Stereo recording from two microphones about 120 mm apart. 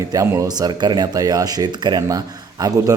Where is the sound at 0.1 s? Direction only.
30° right (ahead or behind).